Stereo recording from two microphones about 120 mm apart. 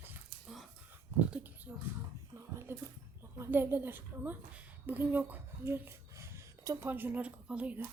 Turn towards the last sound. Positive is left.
turn(degrees=-10)  # may be behind; listen again after turning